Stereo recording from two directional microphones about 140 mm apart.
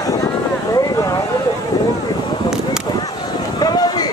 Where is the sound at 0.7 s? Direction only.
25° left (ahead or behind).